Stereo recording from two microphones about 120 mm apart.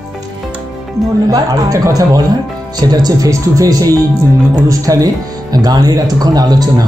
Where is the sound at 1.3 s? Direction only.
30° right (ahead or behind).